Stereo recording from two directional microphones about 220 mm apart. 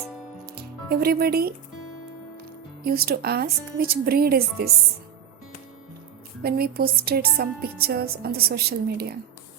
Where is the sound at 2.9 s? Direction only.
45° right (ahead or behind).